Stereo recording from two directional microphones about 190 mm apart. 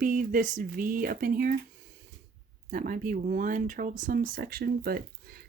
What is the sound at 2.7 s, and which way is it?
Speech, 45° right (ahead or behind).